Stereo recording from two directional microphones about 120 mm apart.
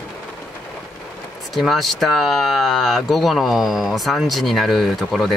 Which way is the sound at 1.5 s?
Centre (ahead or behind).